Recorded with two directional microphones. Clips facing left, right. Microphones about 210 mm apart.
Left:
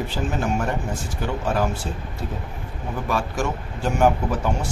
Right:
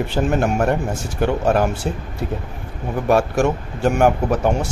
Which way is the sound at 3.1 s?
60° right (ahead or behind).